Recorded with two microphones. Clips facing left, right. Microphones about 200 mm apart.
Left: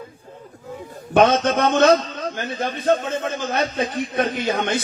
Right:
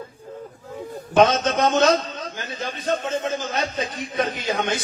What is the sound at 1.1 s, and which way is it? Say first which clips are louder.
A man's voice: left 2 dB; 55° left (ahead or behind).